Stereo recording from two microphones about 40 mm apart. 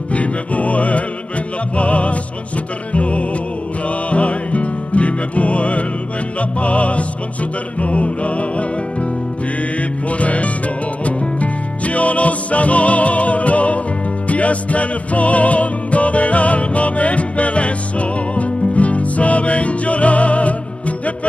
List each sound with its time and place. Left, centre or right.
0.1 s music: left
10.0 s music: left